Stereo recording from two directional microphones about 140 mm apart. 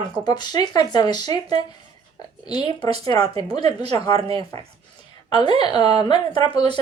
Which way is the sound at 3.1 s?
45° right (ahead or behind).